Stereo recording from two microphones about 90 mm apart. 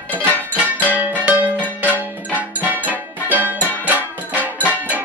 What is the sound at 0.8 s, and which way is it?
Music, 15° right (ahead or behind).